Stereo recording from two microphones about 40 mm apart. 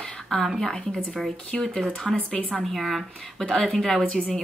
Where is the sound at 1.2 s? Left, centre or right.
Centre.